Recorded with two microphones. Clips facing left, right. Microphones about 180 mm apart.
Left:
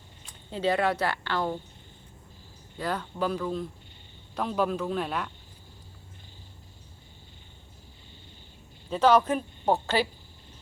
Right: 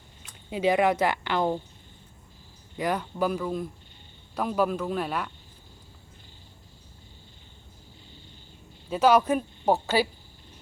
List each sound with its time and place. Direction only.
0.5 s speech: 15° right (ahead or behind)
2.7 s speech: 15° right (ahead or behind)
8.9 s speech: 10° right (ahead or behind)